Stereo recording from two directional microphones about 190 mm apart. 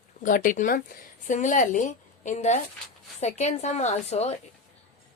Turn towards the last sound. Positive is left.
turn(degrees=35)  # may be behind; listen again after turning